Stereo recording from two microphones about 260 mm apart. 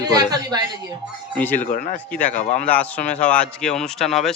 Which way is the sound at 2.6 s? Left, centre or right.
Centre.